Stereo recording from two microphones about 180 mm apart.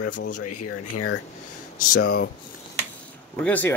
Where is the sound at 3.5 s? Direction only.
10° left (ahead or behind).